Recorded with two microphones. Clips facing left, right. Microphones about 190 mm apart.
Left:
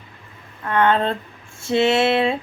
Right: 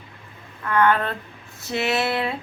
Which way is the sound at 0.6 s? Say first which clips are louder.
Left 2 dB; 25° left (ahead or behind).